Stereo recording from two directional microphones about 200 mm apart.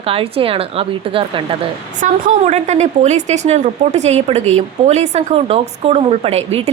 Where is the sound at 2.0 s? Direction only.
35° right (ahead or behind).